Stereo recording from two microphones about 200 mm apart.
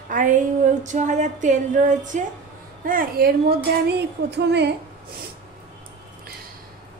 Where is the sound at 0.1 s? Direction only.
40° right (ahead or behind).